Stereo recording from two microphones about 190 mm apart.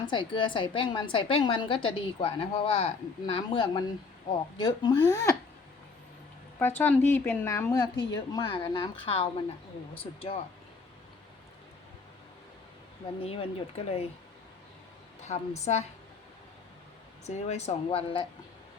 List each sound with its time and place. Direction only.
0.0 s a woman's voice: 25° left (ahead or behind)
6.6 s a woman's voice: 10° left (ahead or behind); by 10.3 s 30° left (ahead or behind)
13.2 s speech: 30° left (ahead or behind)
15.2 s a woman's voice: 35° left (ahead or behind)
17.2 s speech: 35° left (ahead or behind)